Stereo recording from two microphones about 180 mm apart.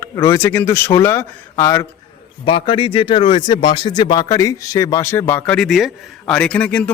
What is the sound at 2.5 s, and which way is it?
Speech, 30° left (ahead or behind).